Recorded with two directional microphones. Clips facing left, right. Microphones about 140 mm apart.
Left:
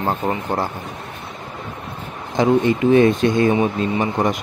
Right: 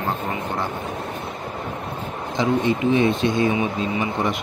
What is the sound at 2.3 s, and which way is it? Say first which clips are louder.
Speech: left 5 dB; 55° left (ahead or behind).